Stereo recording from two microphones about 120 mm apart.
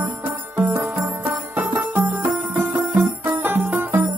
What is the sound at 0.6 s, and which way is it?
Music, 20° right (ahead or behind).